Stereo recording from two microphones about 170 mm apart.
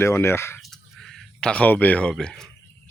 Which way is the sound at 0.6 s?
Centre (ahead or behind).